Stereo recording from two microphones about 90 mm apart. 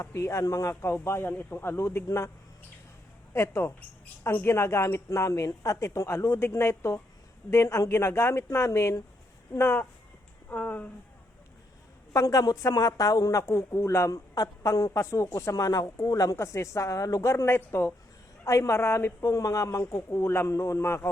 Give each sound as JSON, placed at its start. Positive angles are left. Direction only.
{"t": 0.0, "sound": "a woman's voice", "side_deg": 30}
{"t": 3.3, "sound": "a woman's voice", "side_deg": 30}
{"t": 12.1, "sound": "a woman's voice", "side_deg": 40}
{"t": 13.4, "sound": "a woman's voice", "side_deg": 30}